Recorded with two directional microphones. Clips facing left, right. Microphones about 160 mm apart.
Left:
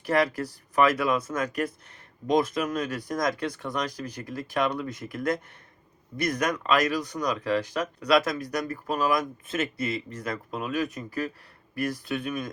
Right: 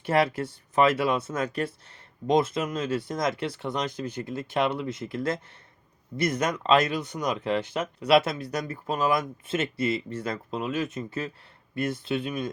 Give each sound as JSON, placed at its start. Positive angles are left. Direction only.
{"t": 0.0, "sound": "speech", "side_deg": -25}